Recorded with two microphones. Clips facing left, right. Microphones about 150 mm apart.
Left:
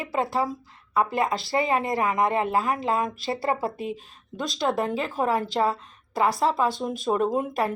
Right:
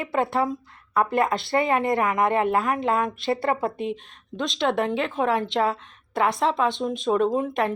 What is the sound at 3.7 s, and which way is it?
A woman's voice, 5° left (ahead or behind).